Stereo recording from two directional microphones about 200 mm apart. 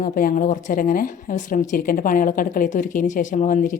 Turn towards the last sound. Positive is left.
turn(degrees=40)  # may be behind; listen again after turning